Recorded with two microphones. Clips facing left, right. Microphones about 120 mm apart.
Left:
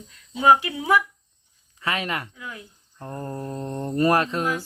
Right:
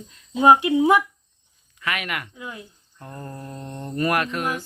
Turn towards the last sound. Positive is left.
turn(degrees=30)  # may be behind; listen again after turning